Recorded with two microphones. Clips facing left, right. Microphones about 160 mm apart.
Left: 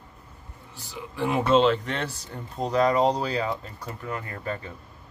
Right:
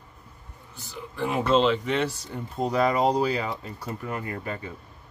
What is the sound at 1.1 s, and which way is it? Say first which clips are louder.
Speech: left 1 dB; centre (ahead or behind).